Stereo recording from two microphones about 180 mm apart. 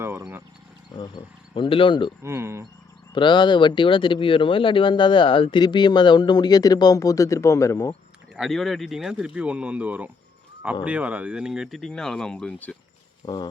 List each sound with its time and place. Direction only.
0.0 s wild animals: 10° right (ahead or behind)
0.9 s speech: 25° left (ahead or behind)
2.2 s speech: 15° right (ahead or behind)
3.2 s speech: 25° left (ahead or behind)
8.4 s speech: centre (ahead or behind)
13.2 s speech: 25° left (ahead or behind)